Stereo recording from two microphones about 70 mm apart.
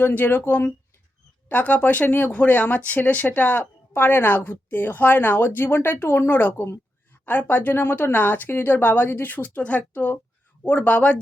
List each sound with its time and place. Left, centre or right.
0.0 s speech: left